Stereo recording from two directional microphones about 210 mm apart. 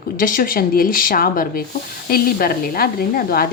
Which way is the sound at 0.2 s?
40° left (ahead or behind).